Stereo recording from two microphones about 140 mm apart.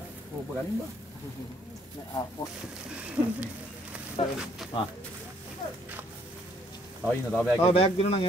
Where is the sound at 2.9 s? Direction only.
10° right (ahead or behind).